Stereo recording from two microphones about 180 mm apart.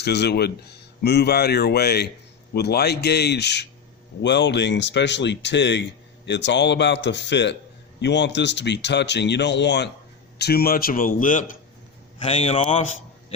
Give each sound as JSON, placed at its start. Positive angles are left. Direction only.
{"t": 0.0, "sound": "a man's voice", "side_deg": 65}
{"t": 12.2, "sound": "speech", "side_deg": 35}